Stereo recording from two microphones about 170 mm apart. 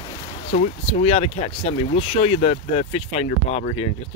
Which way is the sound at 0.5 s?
40° left (ahead or behind).